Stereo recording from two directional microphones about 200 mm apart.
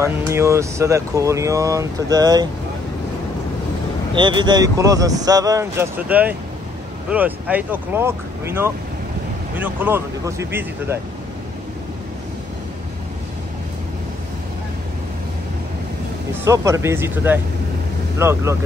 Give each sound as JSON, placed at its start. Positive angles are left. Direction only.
{"t": 0.0, "sound": "speech", "side_deg": -15}
{"t": 4.1, "sound": "speech", "side_deg": -25}
{"t": 16.4, "sound": "speech", "side_deg": -15}